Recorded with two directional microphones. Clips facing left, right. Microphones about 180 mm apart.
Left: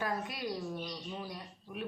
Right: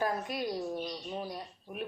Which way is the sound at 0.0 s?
45° right (ahead or behind).